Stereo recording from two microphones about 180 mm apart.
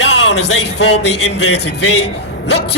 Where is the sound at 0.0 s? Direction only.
80° left.